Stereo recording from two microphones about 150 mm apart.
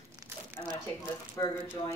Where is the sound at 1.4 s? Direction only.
20° left (ahead or behind).